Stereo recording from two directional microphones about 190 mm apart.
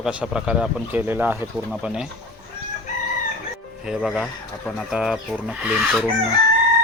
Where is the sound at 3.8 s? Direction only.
Centre (ahead or behind).